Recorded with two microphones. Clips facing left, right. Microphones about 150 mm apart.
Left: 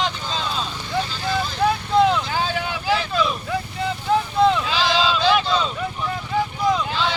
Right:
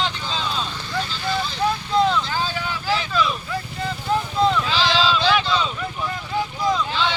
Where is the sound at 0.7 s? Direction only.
15° left (ahead or behind).